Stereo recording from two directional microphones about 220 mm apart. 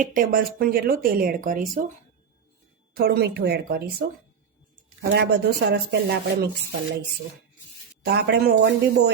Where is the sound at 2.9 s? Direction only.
45° right (ahead or behind).